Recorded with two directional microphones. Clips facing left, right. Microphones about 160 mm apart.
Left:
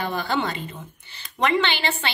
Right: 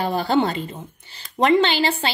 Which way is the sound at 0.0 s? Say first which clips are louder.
Right 5 dB; 35° right (ahead or behind).